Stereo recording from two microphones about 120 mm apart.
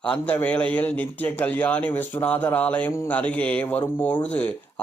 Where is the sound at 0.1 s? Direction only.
15° left (ahead or behind).